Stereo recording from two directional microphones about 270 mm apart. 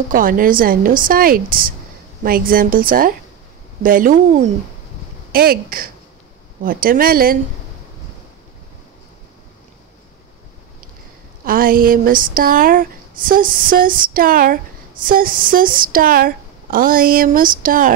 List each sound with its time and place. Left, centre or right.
0.1 s speech: right
11.4 s speech: right